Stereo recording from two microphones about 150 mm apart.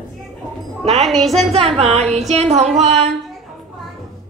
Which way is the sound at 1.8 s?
45° right (ahead or behind).